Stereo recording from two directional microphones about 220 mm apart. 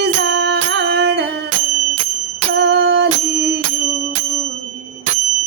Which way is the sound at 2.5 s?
50° right (ahead or behind).